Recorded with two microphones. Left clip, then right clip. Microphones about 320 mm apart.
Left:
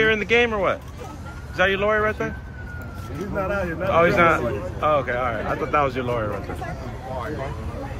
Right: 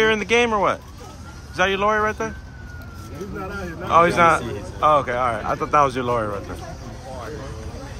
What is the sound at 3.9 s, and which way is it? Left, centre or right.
Speech, centre.